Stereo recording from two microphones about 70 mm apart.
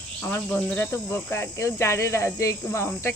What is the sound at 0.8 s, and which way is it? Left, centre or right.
Speech, left.